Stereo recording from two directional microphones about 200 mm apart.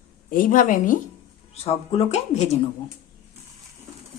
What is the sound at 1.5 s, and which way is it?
Speech, 30° left (ahead or behind).